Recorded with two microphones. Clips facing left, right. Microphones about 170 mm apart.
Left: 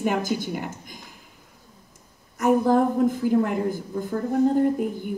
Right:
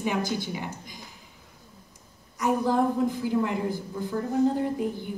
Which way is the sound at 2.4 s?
50° left (ahead or behind).